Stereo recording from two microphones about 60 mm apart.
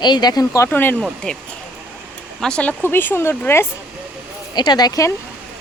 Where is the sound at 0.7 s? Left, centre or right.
Left.